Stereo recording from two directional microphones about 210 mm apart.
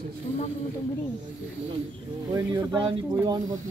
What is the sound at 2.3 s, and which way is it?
Music, 20° right (ahead or behind).